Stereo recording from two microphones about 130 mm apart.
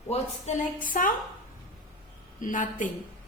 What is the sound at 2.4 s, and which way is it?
Speech, 90° left.